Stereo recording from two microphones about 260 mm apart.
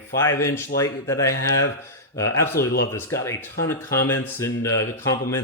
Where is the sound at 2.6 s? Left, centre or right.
Left.